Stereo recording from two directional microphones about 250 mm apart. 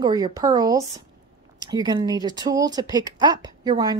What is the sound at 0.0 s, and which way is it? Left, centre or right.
Speech, centre.